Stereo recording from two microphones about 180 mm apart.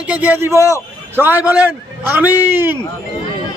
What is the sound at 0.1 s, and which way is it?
A man's voice, 10° right (ahead or behind).